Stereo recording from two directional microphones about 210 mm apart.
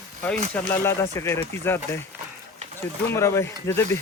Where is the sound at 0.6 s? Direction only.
10° left (ahead or behind).